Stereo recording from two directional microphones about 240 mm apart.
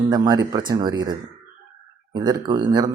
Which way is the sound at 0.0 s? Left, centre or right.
Centre.